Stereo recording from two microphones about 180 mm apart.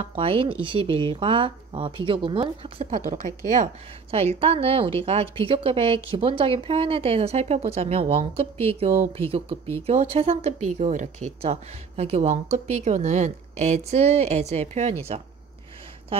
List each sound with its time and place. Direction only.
0.0 s speech: 30° right (ahead or behind)
3.1 s speech: 45° right (ahead or behind)
9.8 s speech: 35° right (ahead or behind)